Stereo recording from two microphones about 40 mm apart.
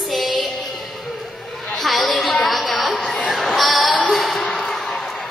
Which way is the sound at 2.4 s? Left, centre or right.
Centre.